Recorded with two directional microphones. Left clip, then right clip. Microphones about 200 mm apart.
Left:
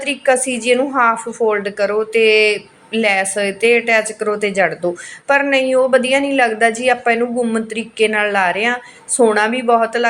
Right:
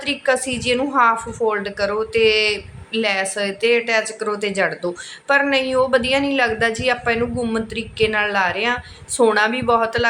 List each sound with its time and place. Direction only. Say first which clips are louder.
0.0 s a woman's voice: left 4 dB; 15° left (ahead or behind)